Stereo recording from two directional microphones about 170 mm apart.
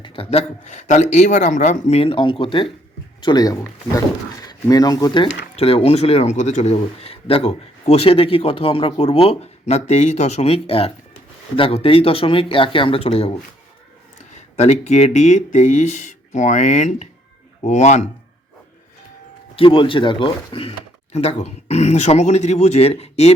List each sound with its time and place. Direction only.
0.0 s speech: 35° left (ahead or behind)
5.5 s speech: 35° left (ahead or behind)
19.5 s speech: 30° left (ahead or behind)